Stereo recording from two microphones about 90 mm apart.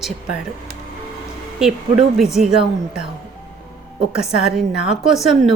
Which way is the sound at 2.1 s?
5° right (ahead or behind).